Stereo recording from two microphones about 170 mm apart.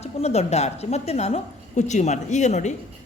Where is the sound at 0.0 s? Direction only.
40° left (ahead or behind).